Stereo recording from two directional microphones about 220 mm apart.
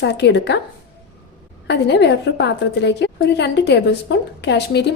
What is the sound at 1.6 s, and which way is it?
A woman's voice, 50° left (ahead or behind).